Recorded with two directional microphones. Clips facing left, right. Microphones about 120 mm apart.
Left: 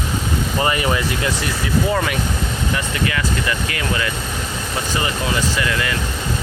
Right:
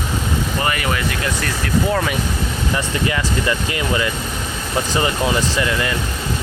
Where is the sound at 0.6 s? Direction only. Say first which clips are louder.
Left 4 dB; 25° left (ahead or behind).